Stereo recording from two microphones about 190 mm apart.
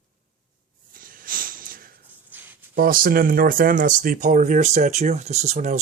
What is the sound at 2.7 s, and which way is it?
Speech, 50° right (ahead or behind).